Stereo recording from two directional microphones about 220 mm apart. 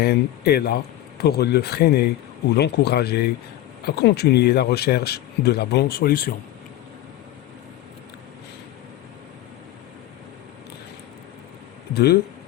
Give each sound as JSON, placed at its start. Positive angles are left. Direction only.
{"t": 0.0, "sound": "speech", "side_deg": 45}